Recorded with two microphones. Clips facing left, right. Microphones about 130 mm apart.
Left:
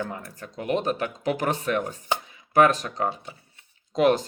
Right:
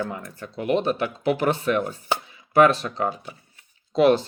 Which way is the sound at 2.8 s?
40° left (ahead or behind).